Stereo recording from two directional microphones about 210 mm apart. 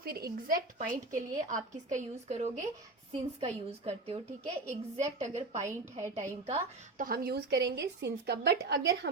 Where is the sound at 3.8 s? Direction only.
30° right (ahead or behind).